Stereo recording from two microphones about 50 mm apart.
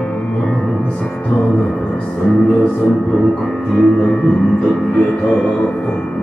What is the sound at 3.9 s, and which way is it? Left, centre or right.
Music, left.